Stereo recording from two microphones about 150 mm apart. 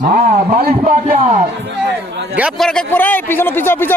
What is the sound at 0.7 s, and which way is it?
Speech, 50° right (ahead or behind).